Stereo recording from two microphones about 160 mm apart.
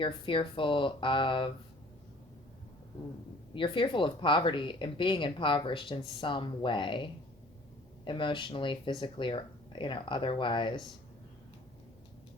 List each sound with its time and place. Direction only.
0.0 s speech: 30° left (ahead or behind)
3.5 s speech: 30° left (ahead or behind)